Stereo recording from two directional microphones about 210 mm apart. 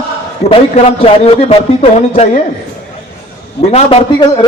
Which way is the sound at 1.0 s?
30° left (ahead or behind).